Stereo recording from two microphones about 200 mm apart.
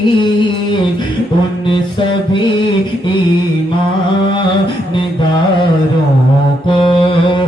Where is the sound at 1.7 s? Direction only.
25° left (ahead or behind).